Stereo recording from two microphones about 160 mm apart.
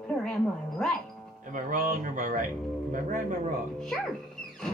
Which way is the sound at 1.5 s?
55° right (ahead or behind).